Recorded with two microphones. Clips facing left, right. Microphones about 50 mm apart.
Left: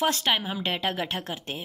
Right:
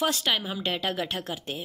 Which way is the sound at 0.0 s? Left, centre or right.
Left.